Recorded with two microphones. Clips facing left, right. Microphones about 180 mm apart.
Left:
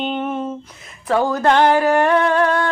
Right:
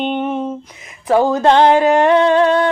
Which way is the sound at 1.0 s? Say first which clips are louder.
Right 4 dB; 20° right (ahead or behind).